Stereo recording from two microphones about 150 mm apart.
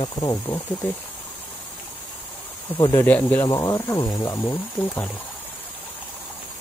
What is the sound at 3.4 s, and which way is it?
Speech, 25° left (ahead or behind).